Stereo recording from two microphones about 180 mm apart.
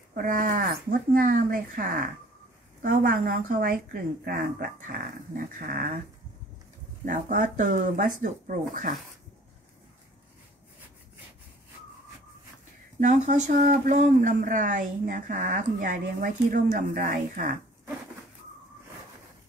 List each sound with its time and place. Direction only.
0.1 s speech: 50° right (ahead or behind)
7.1 s speech: 45° right (ahead or behind)
13.0 s speech: 45° right (ahead or behind)